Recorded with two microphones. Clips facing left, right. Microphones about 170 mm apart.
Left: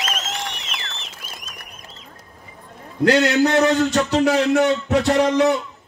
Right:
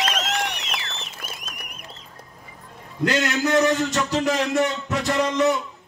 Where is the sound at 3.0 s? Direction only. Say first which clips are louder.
Left 6 dB; 70° left (ahead or behind).